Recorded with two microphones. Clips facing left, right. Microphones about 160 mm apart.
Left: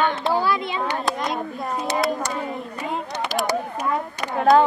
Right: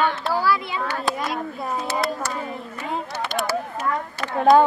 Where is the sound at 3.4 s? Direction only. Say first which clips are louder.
Left 1 dB; 20° left (ahead or behind).